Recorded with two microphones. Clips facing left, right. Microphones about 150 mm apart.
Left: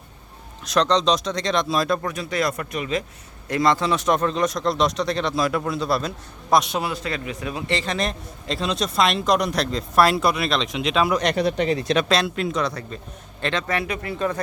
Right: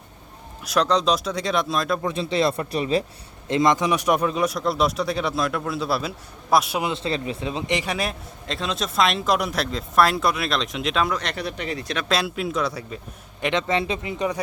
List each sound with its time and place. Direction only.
0.6 s a man's voice: 5° right (ahead or behind)
2.0 s speech: 25° right (ahead or behind)
3.5 s a man's voice: 20° right (ahead or behind)
6.8 s speech: 25° right (ahead or behind)
7.8 s a man's voice: 10° right (ahead or behind)
11.1 s speech: 15° left (ahead or behind)
12.0 s a man's voice: 5° right (ahead or behind)
13.4 s speech: 20° right (ahead or behind)